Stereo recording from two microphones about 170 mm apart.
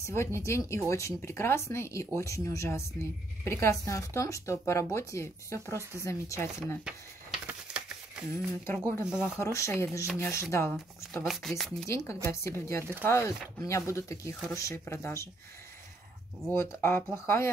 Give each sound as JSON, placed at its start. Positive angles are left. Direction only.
{"t": 0.0, "sound": "speech", "side_deg": 15}
{"t": 6.8, "sound": "a sound", "side_deg": -5}
{"t": 8.3, "sound": "speech", "side_deg": 15}
{"t": 9.0, "sound": "speech", "side_deg": -5}
{"t": 9.4, "sound": "speech", "side_deg": 15}
{"t": 11.2, "sound": "speech", "side_deg": 0}
{"t": 11.9, "sound": "speech", "side_deg": 15}
{"t": 16.5, "sound": "speech", "side_deg": 15}